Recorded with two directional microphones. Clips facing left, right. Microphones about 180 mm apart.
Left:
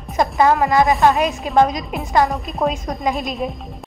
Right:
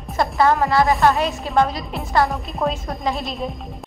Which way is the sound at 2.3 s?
Centre (ahead or behind).